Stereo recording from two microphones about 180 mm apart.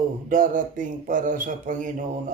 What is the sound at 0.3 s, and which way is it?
A man's voice, 45° right (ahead or behind).